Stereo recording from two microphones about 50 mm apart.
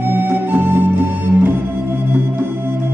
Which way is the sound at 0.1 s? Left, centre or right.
Right.